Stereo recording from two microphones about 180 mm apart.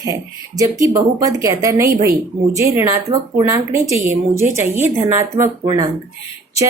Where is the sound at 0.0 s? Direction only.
20° right (ahead or behind).